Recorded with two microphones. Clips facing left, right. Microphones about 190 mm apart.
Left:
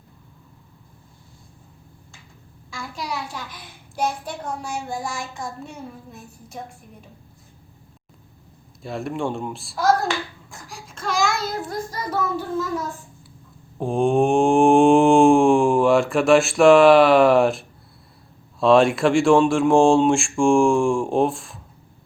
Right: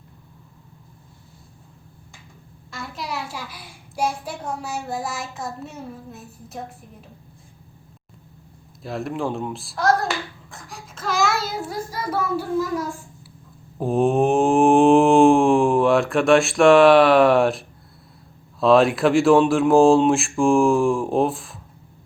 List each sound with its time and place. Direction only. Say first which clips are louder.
2.6 s a child's voice: left 1 dB; centre (ahead or behind)
8.8 s a child's voice: even; centre (ahead or behind)
13.7 s a child's voice: even; 5° right (ahead or behind)